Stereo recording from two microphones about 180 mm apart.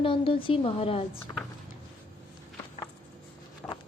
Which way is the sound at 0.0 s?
30° left (ahead or behind).